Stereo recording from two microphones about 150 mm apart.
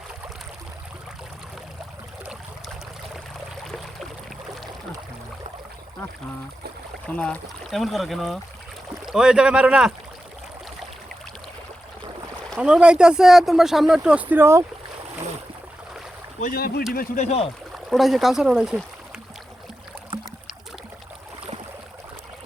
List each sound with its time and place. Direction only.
7.1 s speech: 10° left (ahead or behind)
12.5 s speech: 5° right (ahead or behind)
16.4 s speech: 75° left (ahead or behind)
17.2 s speech: 45° left (ahead or behind)
17.8 s speech: centre (ahead or behind)